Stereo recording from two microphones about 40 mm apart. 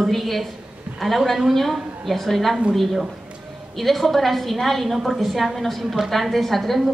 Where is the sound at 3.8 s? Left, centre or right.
Centre.